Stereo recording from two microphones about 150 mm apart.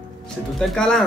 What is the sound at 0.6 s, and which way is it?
Speech, 5° left (ahead or behind).